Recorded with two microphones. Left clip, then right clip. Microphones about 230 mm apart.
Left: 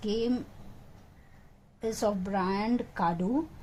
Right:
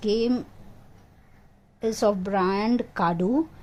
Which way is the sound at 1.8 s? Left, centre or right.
Right.